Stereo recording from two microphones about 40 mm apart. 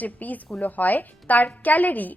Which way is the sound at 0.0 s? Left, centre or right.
Left.